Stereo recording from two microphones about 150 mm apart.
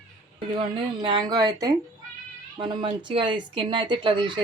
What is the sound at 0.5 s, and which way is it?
Speech, 30° right (ahead or behind).